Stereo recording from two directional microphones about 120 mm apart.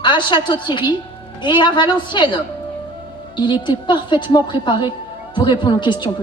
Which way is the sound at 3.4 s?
40° left (ahead or behind).